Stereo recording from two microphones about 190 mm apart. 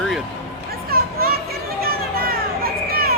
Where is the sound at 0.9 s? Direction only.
55° right (ahead or behind).